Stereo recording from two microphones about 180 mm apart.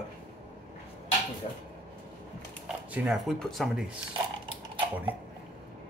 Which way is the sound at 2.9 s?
Centre (ahead or behind).